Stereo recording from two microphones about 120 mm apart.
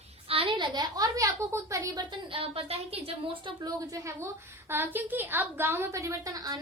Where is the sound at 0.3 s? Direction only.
50° right (ahead or behind).